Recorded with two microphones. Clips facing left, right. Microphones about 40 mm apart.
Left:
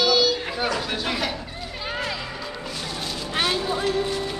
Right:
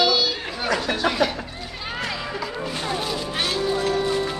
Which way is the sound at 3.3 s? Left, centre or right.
Centre.